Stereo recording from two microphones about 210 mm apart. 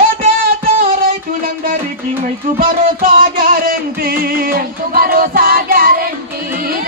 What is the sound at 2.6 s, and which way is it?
Music, 40° right (ahead or behind).